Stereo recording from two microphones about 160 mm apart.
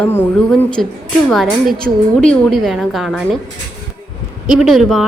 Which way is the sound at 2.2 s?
5° left (ahead or behind).